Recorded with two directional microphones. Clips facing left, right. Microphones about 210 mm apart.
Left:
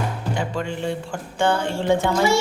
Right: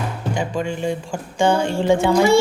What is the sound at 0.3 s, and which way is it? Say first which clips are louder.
Speech: right 4 dB; 15° right (ahead or behind).